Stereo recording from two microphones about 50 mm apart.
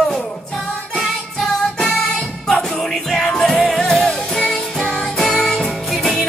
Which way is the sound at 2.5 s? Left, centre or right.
Centre.